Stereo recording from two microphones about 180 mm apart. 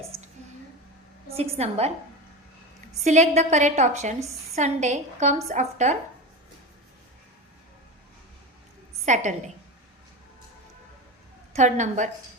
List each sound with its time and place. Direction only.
1.3 s a woman's voice: 35° right (ahead or behind)
3.0 s a woman's voice: 40° right (ahead or behind)
9.0 s a woman's voice: 40° right (ahead or behind)
11.5 s a woman's voice: 40° right (ahead or behind)